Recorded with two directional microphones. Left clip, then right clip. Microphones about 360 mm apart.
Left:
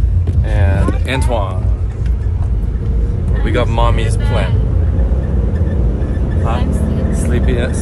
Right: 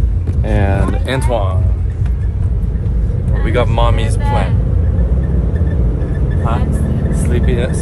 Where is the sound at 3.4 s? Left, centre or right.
Centre.